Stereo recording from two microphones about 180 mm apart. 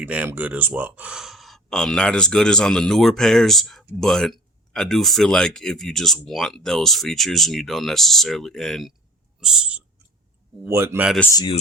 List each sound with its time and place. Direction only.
0.0 s speech: 10° right (ahead or behind)
11.3 s speech: 20° left (ahead or behind)